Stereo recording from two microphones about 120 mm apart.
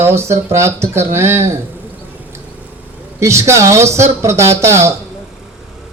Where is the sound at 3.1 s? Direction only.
25° right (ahead or behind).